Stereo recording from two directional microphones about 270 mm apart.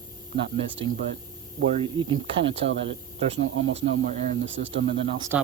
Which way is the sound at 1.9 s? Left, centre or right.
Centre.